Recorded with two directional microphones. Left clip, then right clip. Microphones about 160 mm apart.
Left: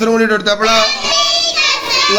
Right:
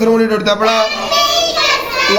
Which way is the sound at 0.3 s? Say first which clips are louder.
Even; 25° left (ahead or behind).